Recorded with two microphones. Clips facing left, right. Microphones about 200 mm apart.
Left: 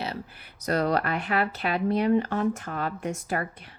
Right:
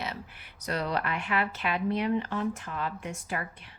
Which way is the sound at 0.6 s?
45° left (ahead or behind).